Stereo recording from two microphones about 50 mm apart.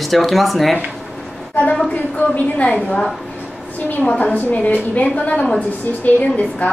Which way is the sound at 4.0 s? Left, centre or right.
Left.